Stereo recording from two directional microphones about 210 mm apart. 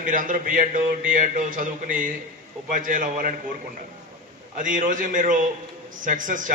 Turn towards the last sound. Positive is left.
turn(degrees=-40)  # may be behind; listen again after turning